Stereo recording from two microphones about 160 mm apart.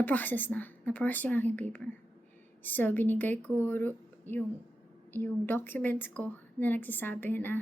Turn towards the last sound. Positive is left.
turn(degrees=10)  # may be behind; listen again after turning